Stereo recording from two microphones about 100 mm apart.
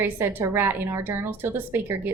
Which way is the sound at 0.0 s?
20° right (ahead or behind).